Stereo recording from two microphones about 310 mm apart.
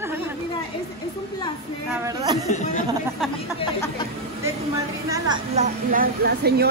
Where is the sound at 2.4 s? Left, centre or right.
Left.